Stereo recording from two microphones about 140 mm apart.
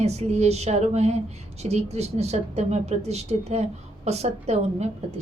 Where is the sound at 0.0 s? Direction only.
50° right (ahead or behind).